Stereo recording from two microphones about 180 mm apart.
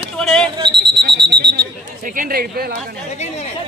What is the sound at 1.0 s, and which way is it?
Speech, 65° right (ahead or behind).